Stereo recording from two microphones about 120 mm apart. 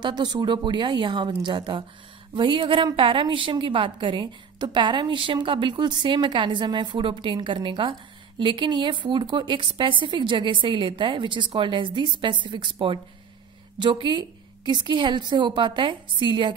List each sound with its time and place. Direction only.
0.0 s a woman's voice: 35° right (ahead or behind)